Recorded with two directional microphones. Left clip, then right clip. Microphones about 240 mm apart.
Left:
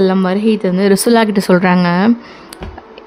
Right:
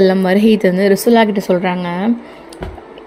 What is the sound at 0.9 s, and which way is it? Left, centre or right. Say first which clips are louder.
Speech: left 1 dB; centre.